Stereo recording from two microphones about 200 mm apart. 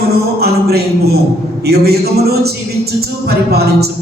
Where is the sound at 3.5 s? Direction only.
50° right (ahead or behind).